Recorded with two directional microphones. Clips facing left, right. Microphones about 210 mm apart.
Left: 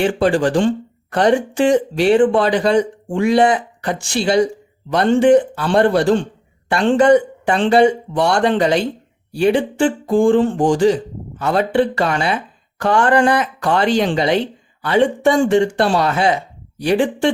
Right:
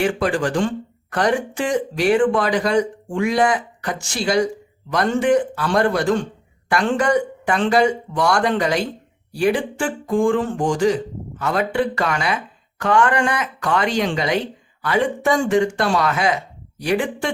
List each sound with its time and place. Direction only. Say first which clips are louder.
0.0 s speech: left 4 dB; 30° left (ahead or behind)